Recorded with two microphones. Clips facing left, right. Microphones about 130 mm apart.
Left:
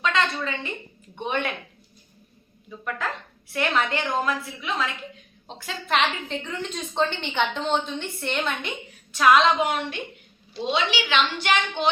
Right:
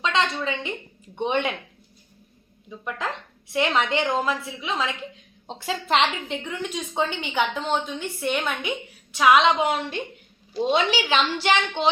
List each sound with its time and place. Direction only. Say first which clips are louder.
0.0 s a woman's voice: right 1 dB; 25° right (ahead or behind)
2.6 s a woman's voice: even; 20° right (ahead or behind); by 8.7 s 5° right (ahead or behind)
9.1 s a woman's voice: even; 15° right (ahead or behind)
9.6 s a woman's voice: right 1 dB; 30° right (ahead or behind)
10.5 s a woman's voice: right 4 dB; 45° right (ahead or behind); by 11.9 s 30° right (ahead or behind)